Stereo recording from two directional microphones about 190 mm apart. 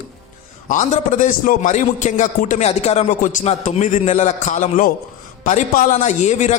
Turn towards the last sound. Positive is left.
turn(degrees=40)  # may be behind; listen again after turning